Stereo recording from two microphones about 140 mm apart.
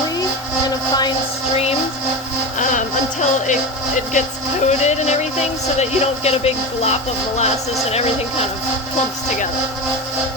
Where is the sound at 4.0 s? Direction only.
60° left (ahead or behind).